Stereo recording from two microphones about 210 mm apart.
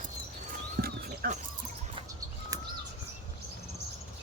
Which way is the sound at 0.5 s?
40° right (ahead or behind).